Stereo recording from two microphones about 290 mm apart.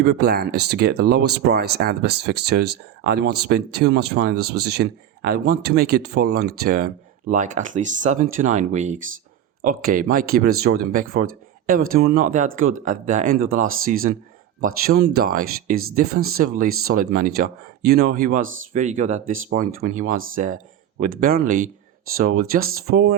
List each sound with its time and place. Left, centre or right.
0.0 s speech: right